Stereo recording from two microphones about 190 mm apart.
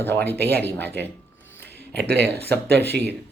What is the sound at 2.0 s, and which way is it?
Speech, 60° right (ahead or behind).